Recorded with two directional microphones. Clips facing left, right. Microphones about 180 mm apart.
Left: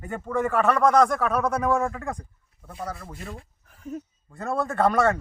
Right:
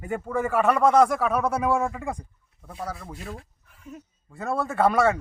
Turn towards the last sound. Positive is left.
turn(degrees=-5)  # may be behind; listen again after turning